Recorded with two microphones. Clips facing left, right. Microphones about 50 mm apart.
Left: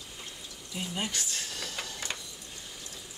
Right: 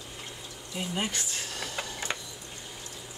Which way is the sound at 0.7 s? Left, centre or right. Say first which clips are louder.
Right 3 dB; centre.